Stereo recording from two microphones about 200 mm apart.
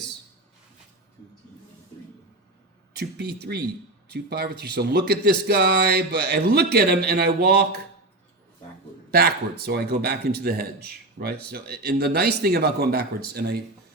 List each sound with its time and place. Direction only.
2.9 s speech: 55° right (ahead or behind)
9.0 s speech: 50° right (ahead or behind)